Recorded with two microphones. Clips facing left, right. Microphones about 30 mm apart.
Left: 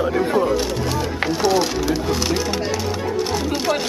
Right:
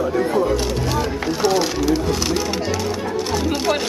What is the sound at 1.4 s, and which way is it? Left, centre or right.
Speech, centre.